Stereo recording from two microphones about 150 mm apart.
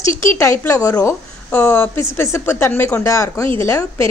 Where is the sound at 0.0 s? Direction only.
20° left (ahead or behind).